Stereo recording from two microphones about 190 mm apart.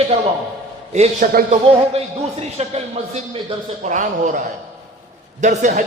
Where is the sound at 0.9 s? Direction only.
45° right (ahead or behind).